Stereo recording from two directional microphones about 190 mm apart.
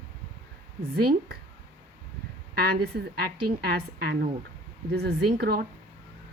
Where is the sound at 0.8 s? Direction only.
55° right (ahead or behind).